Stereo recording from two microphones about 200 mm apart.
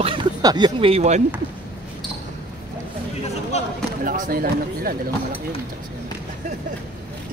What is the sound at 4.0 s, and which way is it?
Speech, 45° right (ahead or behind).